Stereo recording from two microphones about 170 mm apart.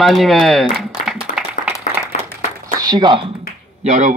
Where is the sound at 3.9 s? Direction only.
45° right (ahead or behind).